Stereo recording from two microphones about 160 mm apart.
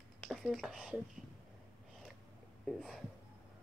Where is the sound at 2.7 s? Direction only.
Centre (ahead or behind).